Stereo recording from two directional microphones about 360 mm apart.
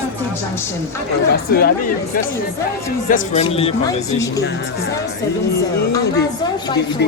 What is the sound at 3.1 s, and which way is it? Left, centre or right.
Speech, centre.